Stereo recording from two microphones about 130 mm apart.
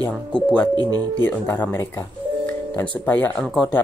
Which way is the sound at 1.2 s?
15° left (ahead or behind).